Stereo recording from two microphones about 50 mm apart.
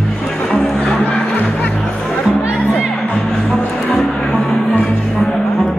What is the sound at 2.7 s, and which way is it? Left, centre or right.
Music, centre.